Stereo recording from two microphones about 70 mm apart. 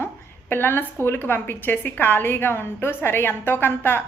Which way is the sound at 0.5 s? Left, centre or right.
Left.